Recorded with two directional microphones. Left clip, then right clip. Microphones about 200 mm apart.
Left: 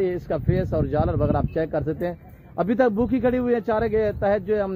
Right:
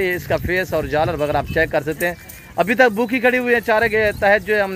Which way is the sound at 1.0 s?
15° right (ahead or behind).